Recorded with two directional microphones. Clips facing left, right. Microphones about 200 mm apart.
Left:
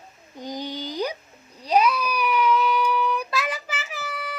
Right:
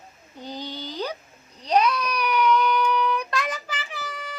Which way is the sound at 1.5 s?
5° left (ahead or behind).